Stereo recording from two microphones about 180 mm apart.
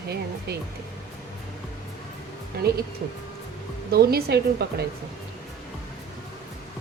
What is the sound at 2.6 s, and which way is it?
Speech, 60° right (ahead or behind).